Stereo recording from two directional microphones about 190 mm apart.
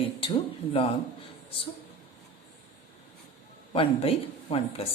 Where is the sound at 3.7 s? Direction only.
30° left (ahead or behind).